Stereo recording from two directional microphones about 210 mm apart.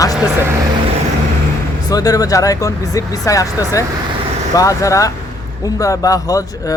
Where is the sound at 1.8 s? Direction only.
15° left (ahead or behind).